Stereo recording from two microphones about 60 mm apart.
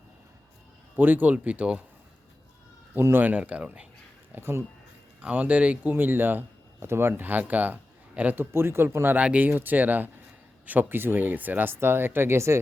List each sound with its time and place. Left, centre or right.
0.9 s speech: right
3.0 s speech: right
3.3 s speech: centre
4.4 s speech: right
5.2 s speech: right
8.4 s speech: right
9.1 s speech: right